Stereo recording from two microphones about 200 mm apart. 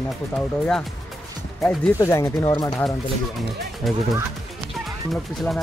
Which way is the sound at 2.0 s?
15° left (ahead or behind).